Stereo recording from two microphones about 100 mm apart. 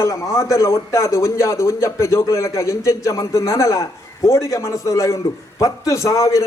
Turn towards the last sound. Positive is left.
turn(degrees=30)  # may be behind; listen again after turning